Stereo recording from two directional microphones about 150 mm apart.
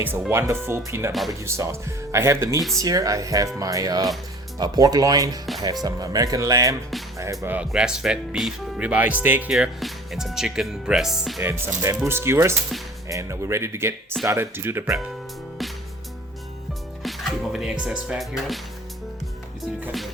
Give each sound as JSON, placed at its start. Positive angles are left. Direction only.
{"t": 0.0, "sound": "speech", "side_deg": -15}
{"t": 11.3, "sound": "speech", "side_deg": -20}
{"t": 17.0, "sound": "speech", "side_deg": 0}